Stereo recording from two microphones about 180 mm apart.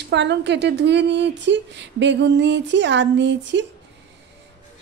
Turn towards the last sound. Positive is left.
turn(degrees=-85)